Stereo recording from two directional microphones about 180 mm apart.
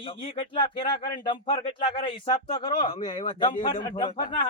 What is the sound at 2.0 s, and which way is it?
Speech, 35° left (ahead or behind).